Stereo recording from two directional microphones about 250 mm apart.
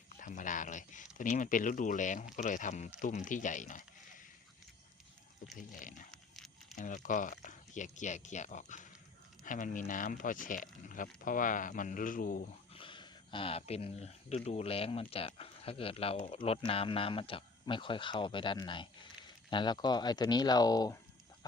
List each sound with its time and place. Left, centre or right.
0.2 s speech: left
5.5 s speech: left
6.1 s a sound: centre
6.7 s speech: left
12.7 s speech: centre